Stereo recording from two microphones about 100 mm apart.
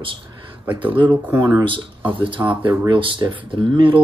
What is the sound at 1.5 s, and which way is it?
Speech, 55° right (ahead or behind).